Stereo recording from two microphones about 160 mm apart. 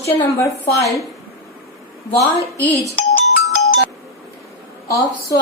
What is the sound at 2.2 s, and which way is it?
Speech, 20° left (ahead or behind).